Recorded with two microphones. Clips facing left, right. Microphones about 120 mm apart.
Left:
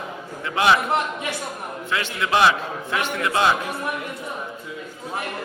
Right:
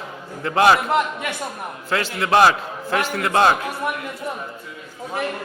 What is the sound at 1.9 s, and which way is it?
A man's voice, 40° right (ahead or behind).